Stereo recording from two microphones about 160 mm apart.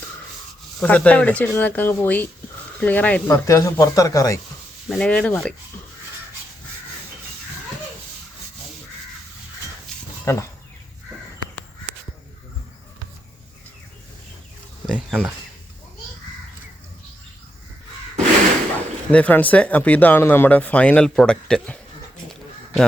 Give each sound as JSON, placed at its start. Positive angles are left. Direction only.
{"t": 0.8, "sound": "speech", "side_deg": 10}
{"t": 4.9, "sound": "speech", "side_deg": 5}
{"t": 10.3, "sound": "speech", "side_deg": 20}
{"t": 14.8, "sound": "speech", "side_deg": -5}
{"t": 19.1, "sound": "speech", "side_deg": 10}
{"t": 22.3, "sound": "a sound", "side_deg": 0}